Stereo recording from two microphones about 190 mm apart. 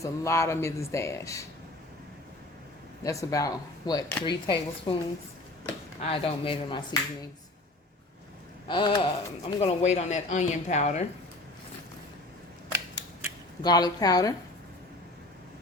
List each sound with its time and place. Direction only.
0.0 s speech: 15° left (ahead or behind)
3.0 s speech: 15° left (ahead or behind)
6.0 s speech: 30° left (ahead or behind)
8.6 s a man's voice: 25° left (ahead or behind)
13.6 s speech: 20° left (ahead or behind)